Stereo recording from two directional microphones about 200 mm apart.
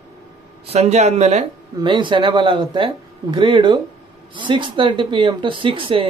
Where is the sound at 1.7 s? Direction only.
25° right (ahead or behind).